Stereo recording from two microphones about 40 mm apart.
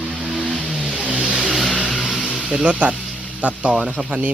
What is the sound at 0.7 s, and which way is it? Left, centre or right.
Vehicle, right.